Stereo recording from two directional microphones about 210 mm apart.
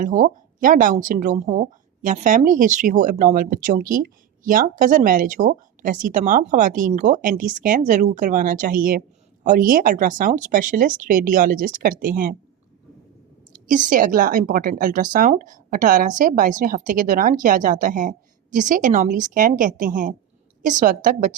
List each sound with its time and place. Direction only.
0.0 s speech: 40° right (ahead or behind)
13.7 s speech: 40° right (ahead or behind)